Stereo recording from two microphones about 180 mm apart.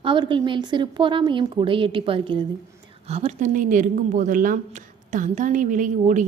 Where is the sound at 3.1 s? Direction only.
40° right (ahead or behind).